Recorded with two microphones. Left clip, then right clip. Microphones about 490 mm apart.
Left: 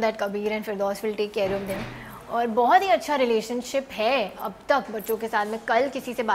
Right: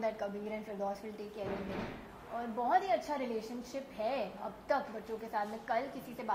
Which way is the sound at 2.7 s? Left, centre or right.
Left.